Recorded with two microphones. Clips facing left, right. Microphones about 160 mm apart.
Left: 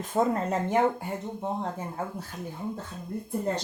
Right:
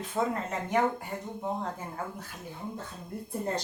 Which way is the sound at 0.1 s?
40° left (ahead or behind).